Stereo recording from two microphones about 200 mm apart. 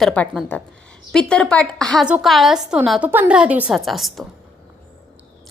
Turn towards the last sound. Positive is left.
turn(degrees=0)  # may be behind; listen again after turning